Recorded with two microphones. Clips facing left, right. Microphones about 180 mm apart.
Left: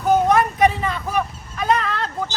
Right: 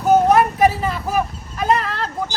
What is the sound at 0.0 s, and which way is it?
Vehicle, 5° right (ahead or behind).